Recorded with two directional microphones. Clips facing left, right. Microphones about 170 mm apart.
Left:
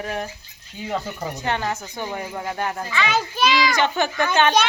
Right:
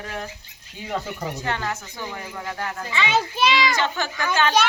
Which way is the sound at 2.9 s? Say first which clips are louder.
Right 3 dB; 25° right (ahead or behind).